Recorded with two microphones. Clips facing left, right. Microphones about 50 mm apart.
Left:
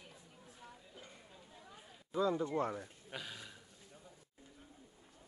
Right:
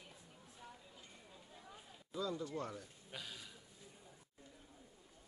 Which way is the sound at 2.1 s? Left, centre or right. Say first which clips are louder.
Left 8 dB; left.